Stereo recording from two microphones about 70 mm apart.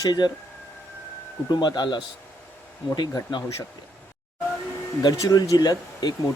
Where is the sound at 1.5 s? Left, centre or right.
Left.